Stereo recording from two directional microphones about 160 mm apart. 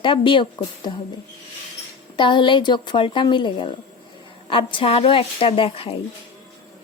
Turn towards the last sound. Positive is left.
turn(degrees=35)  # may be behind; listen again after turning